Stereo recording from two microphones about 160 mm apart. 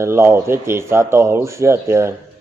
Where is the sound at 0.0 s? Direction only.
15° right (ahead or behind).